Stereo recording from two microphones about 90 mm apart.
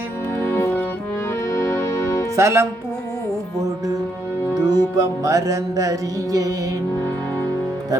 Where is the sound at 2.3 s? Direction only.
30° right (ahead or behind).